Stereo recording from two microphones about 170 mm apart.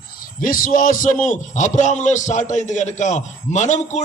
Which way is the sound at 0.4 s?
55° left (ahead or behind).